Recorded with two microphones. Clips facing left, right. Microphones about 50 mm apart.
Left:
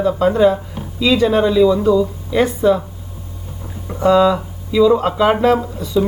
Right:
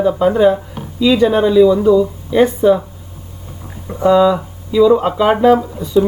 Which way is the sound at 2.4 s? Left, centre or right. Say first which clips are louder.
Right 3 dB; right.